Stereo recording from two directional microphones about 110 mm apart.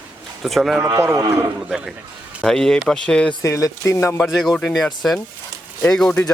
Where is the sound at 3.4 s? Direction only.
30° left (ahead or behind).